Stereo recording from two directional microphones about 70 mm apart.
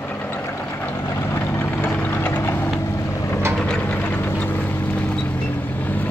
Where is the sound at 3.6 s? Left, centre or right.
Centre.